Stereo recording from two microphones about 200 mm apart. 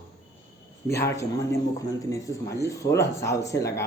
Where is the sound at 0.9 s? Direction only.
15° left (ahead or behind).